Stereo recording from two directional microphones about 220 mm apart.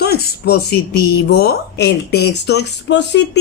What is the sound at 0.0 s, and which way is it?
Speech, 45° left (ahead or behind).